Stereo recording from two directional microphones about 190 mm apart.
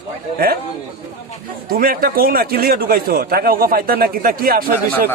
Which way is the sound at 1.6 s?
50° right (ahead or behind).